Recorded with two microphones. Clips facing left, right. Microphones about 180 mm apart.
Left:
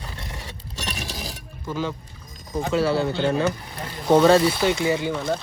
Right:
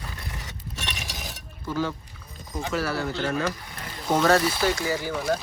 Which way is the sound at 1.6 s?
15° left (ahead or behind).